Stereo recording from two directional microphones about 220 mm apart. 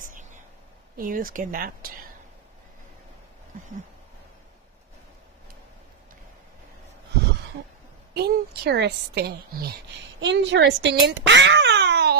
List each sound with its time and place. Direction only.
0.0 s whispering: 35° right (ahead or behind)
0.9 s speech: 40° right (ahead or behind)
8.1 s speech: 50° right (ahead or behind)